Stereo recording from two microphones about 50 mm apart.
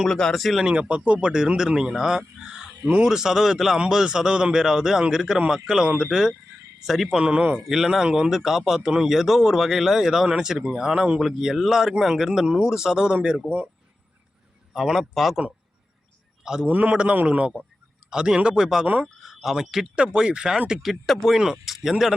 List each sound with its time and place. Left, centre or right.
0.0 s a man's voice: centre
0.6 s speech: centre
1.5 s a man's voice: centre
7.2 s speech: centre
7.5 s speech: centre
14.7 s a man's voice: centre
16.4 s a man's voice: centre
16.6 s speech: right; by 18.9 s centre
19.0 s speech: centre
20.0 s speech: centre
20.8 s a man's voice: centre
21.3 s speech: centre